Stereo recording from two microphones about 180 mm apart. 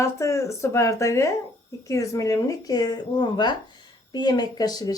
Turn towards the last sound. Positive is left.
turn(degrees=20)  # may be behind; listen again after turning